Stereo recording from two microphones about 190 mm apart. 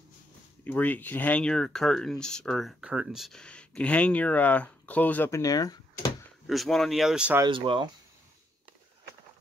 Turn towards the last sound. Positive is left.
turn(degrees=-25)  # may be behind; listen again after turning